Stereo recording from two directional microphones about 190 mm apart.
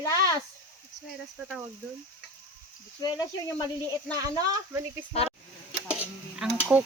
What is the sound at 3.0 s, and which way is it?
Speech, 20° left (ahead or behind).